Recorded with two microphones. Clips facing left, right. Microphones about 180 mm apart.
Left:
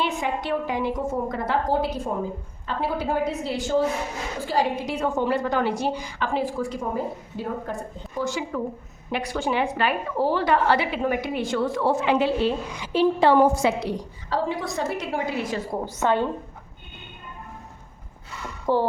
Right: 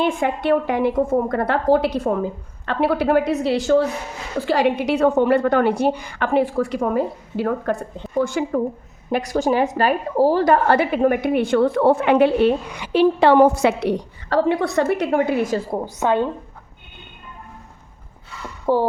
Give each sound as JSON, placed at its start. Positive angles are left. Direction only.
{"t": 0.0, "sound": "a woman's voice", "side_deg": -55}
{"t": 8.2, "sound": "speech", "side_deg": -55}
{"t": 9.0, "sound": "a woman's voice", "side_deg": -40}
{"t": 16.0, "sound": "a woman's voice", "side_deg": -15}
{"t": 18.6, "sound": "a sound", "side_deg": -15}